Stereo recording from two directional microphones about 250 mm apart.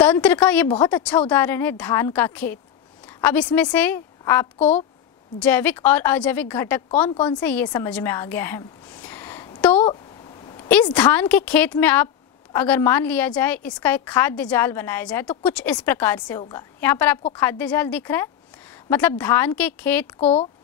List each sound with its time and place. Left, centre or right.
0.0 s a woman's voice: centre
3.1 s a sound: centre
3.7 s speech: centre
4.6 s a woman's voice: left
5.4 s a woman's voice: centre
20.2 s a woman's voice: left